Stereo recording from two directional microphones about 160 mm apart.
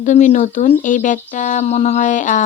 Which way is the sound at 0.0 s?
50° left (ahead or behind).